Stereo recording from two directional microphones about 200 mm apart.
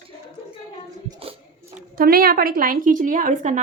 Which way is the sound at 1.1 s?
30° right (ahead or behind).